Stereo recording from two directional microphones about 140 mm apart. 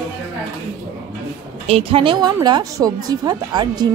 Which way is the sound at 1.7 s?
45° right (ahead or behind).